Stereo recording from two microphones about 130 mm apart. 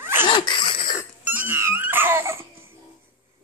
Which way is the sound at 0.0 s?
15° right (ahead or behind).